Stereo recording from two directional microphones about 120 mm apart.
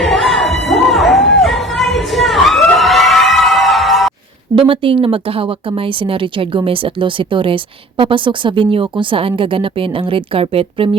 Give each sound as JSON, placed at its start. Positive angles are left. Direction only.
{"t": 0.0, "sound": "crowd", "side_deg": 0}
{"t": 4.6, "sound": "speech", "side_deg": -50}